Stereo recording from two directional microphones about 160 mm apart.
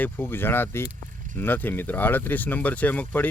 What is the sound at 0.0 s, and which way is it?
Speech, 15° left (ahead or behind).